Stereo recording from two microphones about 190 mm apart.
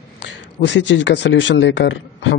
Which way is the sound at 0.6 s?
70° left (ahead or behind).